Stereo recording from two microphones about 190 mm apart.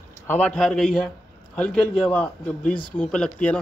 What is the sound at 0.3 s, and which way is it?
A man's voice, 10° left (ahead or behind).